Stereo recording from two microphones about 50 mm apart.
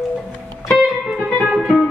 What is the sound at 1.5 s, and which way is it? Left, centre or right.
Music, centre.